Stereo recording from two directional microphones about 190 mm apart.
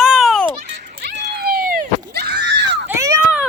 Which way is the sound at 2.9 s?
15° right (ahead or behind).